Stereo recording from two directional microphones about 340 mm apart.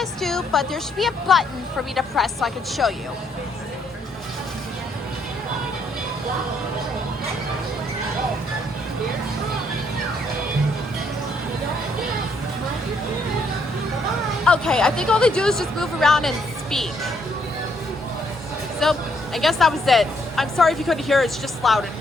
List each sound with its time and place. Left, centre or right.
0.0 s speech: centre
14.4 s speech: centre
18.8 s speech: centre